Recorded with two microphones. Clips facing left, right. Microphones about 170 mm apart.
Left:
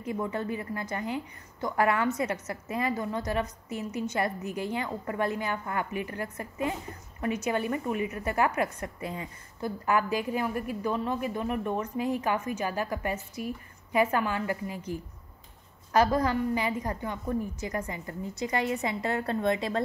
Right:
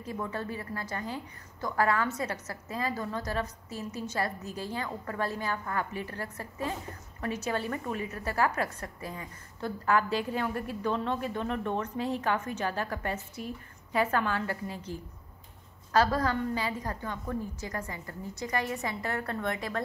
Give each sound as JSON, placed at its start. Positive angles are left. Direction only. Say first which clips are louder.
{"t": 0.0, "sound": "a woman's voice", "louder": "left 4 dB", "side_deg": 20}